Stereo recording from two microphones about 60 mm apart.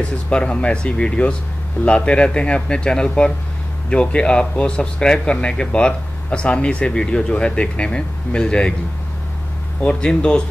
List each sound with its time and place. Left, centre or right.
0.3 s speech: centre
9.8 s speech: left